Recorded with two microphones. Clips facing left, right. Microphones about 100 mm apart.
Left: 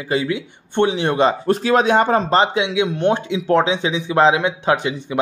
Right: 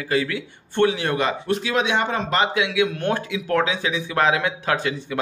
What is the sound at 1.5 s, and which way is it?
A man's voice, 40° left (ahead or behind).